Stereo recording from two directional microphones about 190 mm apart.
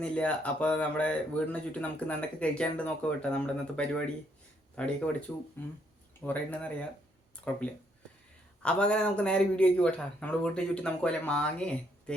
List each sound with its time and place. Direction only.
0.0 s a man's voice: 5° left (ahead or behind)
8.6 s a man's voice: 5° left (ahead or behind)